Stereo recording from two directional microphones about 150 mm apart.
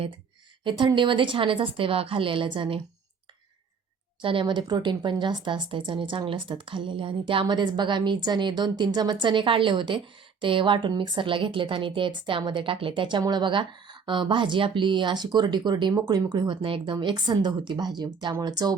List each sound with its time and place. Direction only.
0.6 s a woman's voice: 30° right (ahead or behind)
4.2 s a woman's voice: 35° right (ahead or behind)